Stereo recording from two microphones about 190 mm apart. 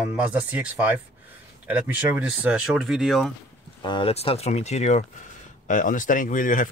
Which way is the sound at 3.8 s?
25° left (ahead or behind).